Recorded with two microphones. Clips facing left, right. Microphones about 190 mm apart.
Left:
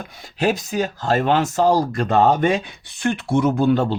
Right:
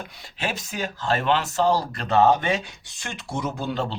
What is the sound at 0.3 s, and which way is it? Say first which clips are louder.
Speech: left 9 dB; 40° left (ahead or behind).